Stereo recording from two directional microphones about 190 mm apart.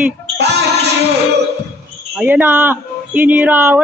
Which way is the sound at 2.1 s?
10° right (ahead or behind).